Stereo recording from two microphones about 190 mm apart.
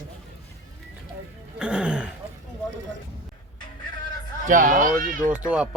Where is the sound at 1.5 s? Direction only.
5° right (ahead or behind).